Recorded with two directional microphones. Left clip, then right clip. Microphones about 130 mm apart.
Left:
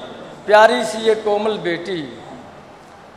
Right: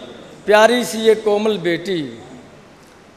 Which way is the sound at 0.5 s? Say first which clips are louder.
Left 1 dB; 50° right (ahead or behind).